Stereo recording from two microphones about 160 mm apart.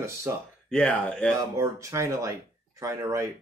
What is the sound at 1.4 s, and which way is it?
Speech, 20° right (ahead or behind).